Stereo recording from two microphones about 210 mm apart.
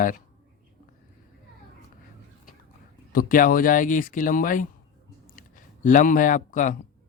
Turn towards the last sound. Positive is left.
turn(degrees=40)  # may be behind; listen again after turning